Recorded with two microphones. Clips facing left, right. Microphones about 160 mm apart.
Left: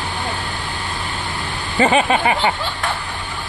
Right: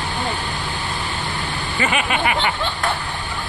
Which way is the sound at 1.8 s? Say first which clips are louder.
Left 6 dB; 35° left (ahead or behind).